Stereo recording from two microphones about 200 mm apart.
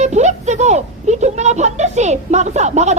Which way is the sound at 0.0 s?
35° right (ahead or behind).